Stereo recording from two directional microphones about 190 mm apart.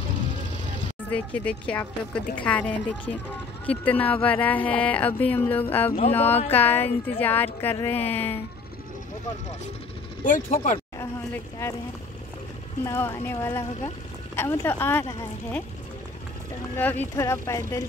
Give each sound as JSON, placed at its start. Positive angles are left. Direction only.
{"t": 1.1, "sound": "speech", "side_deg": 5}
{"t": 10.2, "sound": "speech", "side_deg": 45}
{"t": 12.8, "sound": "speech", "side_deg": 15}
{"t": 16.7, "sound": "speech", "side_deg": 10}